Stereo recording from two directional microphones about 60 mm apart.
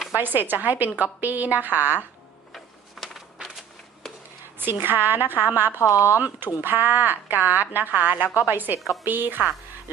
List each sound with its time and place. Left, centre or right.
0.2 s a woman's voice: right
3.0 s a sound: centre
4.8 s a woman's voice: right
5.8 s speech: left
6.1 s a woman's voice: right